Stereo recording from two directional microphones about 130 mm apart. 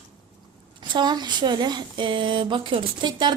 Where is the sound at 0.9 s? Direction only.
35° right (ahead or behind).